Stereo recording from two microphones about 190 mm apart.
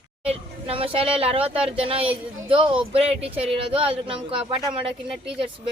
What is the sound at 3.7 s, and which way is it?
Speech, 30° right (ahead or behind).